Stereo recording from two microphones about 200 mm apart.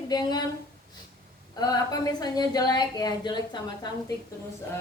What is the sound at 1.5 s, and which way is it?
Speech, 20° left (ahead or behind).